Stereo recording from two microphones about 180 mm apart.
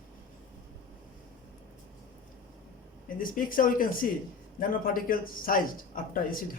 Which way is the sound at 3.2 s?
50° left (ahead or behind).